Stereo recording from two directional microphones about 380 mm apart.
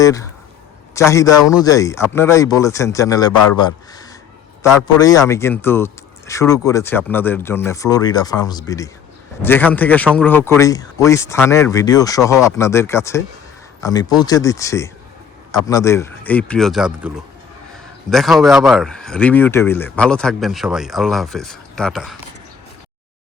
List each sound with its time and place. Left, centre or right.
0.0 s a man's voice: centre
3.3 s a man's voice: left
4.6 s a man's voice: centre
18.1 s speech: centre